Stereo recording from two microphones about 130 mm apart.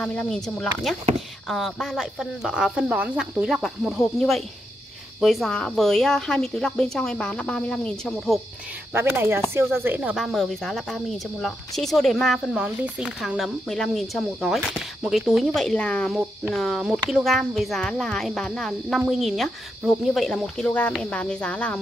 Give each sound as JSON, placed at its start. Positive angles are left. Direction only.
{"t": 0.0, "sound": "speech", "side_deg": 10}
{"t": 8.9, "sound": "speech", "side_deg": -20}
{"t": 10.1, "sound": "speech", "side_deg": 0}